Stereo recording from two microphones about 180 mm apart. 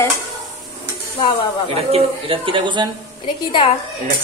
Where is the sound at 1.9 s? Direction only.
30° right (ahead or behind).